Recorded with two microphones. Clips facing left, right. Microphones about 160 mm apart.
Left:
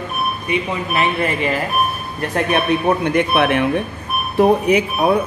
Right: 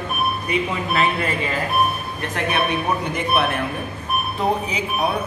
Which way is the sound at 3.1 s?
70° left (ahead or behind).